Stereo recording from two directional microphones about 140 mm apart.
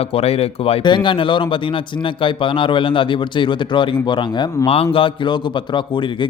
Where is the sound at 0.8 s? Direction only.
35° left (ahead or behind).